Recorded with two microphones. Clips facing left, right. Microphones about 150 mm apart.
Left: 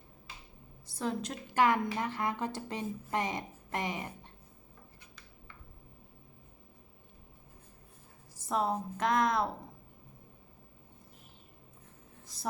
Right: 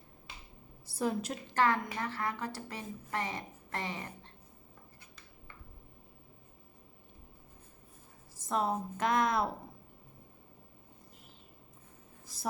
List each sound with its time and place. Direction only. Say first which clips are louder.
0.9 s a woman's voice: right 2 dB; 5° right (ahead or behind)
1.5 s speech: left 3 dB; 15° left (ahead or behind)
8.4 s a woman's voice: left 1 dB; centre (ahead or behind)